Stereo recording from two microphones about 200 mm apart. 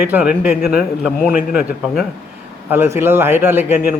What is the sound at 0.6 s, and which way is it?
A man's voice, 50° left (ahead or behind).